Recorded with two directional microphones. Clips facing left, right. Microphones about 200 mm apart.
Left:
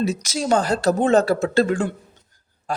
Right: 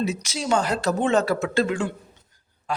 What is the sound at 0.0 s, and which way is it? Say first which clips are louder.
Speech: left 3 dB; 40° left (ahead or behind).